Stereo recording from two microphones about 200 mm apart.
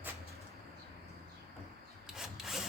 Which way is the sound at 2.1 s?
Centre (ahead or behind).